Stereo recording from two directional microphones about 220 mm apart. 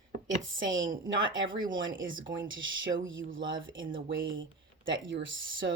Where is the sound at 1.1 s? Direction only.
60° right (ahead or behind).